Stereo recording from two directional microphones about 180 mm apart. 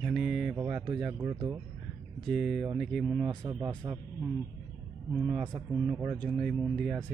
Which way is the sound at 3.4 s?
15° right (ahead or behind).